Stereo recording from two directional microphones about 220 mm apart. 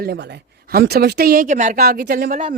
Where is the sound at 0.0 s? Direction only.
45° right (ahead or behind).